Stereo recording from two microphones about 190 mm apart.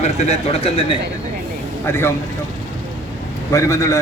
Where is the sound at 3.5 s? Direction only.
15° left (ahead or behind).